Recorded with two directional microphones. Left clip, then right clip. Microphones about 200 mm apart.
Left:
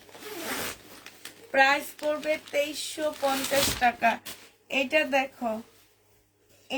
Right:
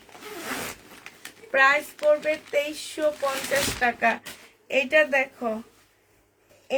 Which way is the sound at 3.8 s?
35° right (ahead or behind).